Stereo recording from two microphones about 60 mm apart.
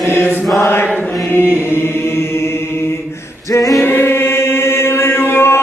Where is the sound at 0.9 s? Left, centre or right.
Left.